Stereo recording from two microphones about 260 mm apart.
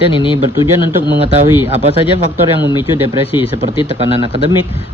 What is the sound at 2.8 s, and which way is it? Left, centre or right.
Speech, centre.